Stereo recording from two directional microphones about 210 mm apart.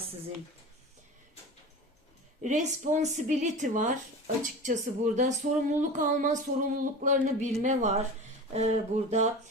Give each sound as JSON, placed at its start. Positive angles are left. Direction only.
{"t": 2.4, "sound": "a woman's voice", "side_deg": -35}